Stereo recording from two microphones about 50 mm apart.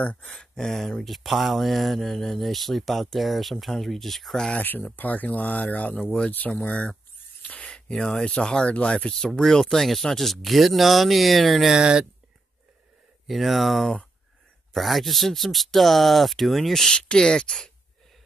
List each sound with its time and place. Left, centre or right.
0.0 s speech: left
0.3 s speech: centre
4.6 s speech: left
7.4 s a sound: left
7.9 s speech: centre
11.7 s speech: centre
13.3 s speech: centre
16.9 s speech: centre